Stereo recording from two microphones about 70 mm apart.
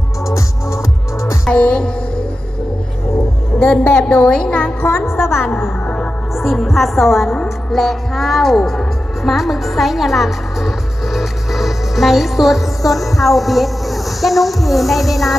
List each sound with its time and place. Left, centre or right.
1.5 s music: centre
3.8 s a woman's voice: left
4.2 s a woman's voice: centre
4.8 s music: left
6.3 s a woman's voice: centre
7.4 s music: centre